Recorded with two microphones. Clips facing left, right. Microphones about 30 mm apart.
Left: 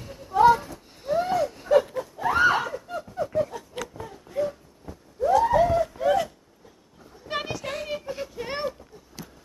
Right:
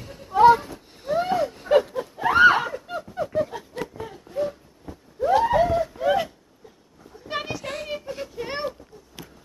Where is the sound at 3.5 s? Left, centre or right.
Right.